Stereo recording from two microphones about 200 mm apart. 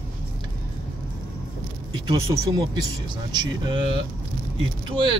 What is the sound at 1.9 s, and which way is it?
Speech, 20° right (ahead or behind).